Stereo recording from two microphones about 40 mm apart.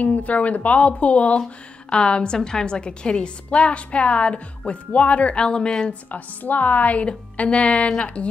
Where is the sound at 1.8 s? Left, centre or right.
Left.